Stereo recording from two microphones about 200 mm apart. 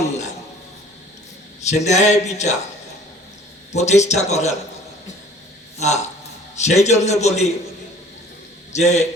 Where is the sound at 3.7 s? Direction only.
35° left (ahead or behind).